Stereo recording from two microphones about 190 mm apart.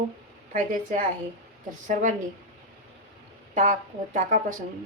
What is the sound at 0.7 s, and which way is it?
A woman's voice, 45° right (ahead or behind).